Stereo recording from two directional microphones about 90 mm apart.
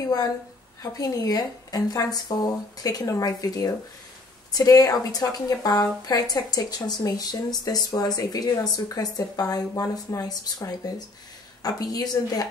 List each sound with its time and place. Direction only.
0.9 s speech: 45° left (ahead or behind)